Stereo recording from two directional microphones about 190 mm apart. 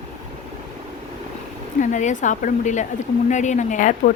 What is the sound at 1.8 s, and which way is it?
Speech, 40° left (ahead or behind).